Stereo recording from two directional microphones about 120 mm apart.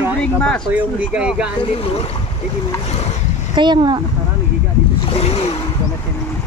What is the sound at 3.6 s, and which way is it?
Speech, 40° right (ahead or behind).